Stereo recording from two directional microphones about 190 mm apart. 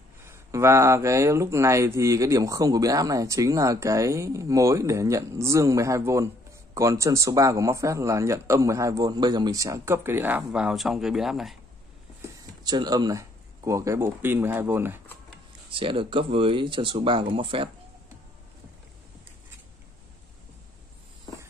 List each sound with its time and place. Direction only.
0.2 s speech: 15° right (ahead or behind)
12.6 s speech: 20° right (ahead or behind)
15.7 s speech: 25° right (ahead or behind)